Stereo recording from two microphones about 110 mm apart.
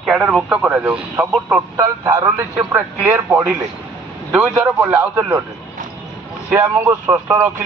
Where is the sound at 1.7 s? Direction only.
30° right (ahead or behind).